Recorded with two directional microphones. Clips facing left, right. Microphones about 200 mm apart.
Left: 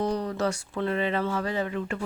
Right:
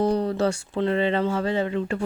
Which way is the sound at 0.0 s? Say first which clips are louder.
Right 5 dB; 30° right (ahead or behind).